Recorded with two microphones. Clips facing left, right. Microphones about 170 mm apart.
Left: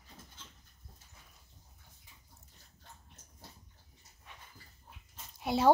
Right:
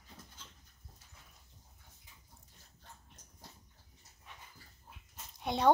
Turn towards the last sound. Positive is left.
turn(degrees=5)  # may be behind; listen again after turning